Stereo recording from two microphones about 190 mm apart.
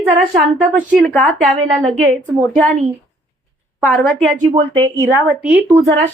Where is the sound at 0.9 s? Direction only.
Centre (ahead or behind).